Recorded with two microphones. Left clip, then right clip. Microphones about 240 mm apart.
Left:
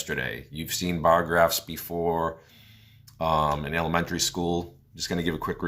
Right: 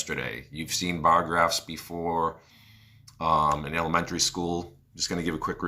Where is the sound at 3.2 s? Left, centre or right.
Left.